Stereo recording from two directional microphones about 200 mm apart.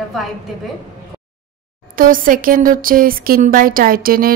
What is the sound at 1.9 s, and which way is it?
Speech, 45° right (ahead or behind).